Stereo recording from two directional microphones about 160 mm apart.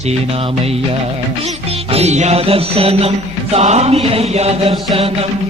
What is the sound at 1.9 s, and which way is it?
Music, 40° right (ahead or behind).